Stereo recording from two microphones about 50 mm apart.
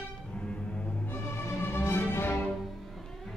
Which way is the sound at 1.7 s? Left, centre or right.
Left.